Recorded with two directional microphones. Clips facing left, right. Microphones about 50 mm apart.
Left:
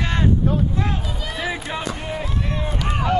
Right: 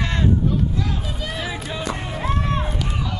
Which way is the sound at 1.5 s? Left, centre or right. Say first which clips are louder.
Left 1 dB; centre.